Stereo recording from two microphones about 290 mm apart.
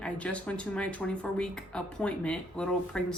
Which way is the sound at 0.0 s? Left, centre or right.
Centre.